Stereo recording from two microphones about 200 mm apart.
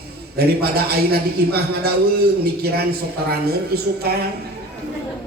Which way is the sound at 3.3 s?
50° right (ahead or behind).